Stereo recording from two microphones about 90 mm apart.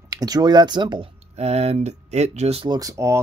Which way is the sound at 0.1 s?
45° right (ahead or behind).